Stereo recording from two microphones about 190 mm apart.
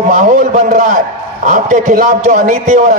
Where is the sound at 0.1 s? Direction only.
45° right (ahead or behind).